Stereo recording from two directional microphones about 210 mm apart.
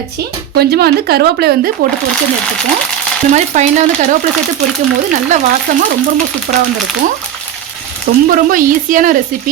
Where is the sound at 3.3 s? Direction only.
35° right (ahead or behind).